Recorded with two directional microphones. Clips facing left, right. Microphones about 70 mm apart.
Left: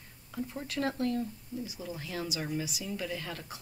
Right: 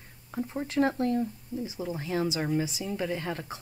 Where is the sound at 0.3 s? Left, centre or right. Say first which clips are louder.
Right 5 dB; right.